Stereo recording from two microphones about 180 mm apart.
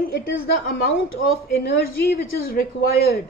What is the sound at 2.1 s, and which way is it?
A woman's voice, 60° left (ahead or behind).